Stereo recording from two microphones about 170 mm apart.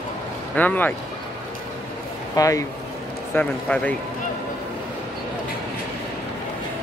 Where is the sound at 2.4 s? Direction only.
20° left (ahead or behind).